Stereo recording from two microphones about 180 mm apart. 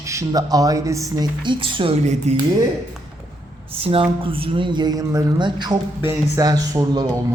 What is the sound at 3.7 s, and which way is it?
A man's voice, 30° right (ahead or behind).